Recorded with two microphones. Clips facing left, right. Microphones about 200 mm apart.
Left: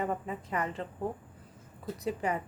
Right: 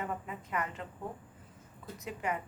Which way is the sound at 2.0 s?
35° left (ahead or behind).